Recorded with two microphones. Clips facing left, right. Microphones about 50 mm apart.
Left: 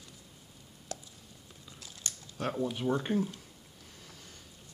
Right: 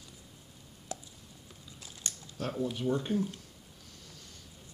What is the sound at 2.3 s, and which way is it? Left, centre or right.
Speech, centre.